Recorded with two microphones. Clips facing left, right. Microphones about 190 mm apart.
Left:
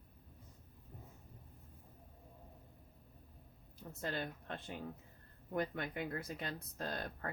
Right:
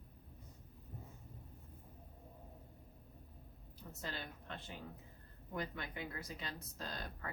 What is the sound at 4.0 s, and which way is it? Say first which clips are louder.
Speech: left 6 dB; 50° left (ahead or behind).